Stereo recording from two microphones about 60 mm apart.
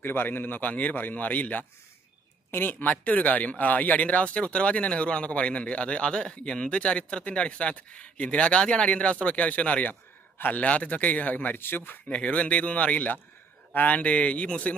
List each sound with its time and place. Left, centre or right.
0.0 s speech: left
12.0 s speech: centre